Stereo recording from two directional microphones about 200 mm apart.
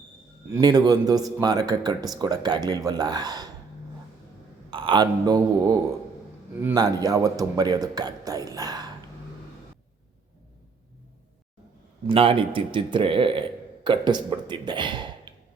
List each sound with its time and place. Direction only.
0.5 s speech: 20° right (ahead or behind)
4.7 s a man's voice: 25° right (ahead or behind)
12.0 s speech: 25° right (ahead or behind)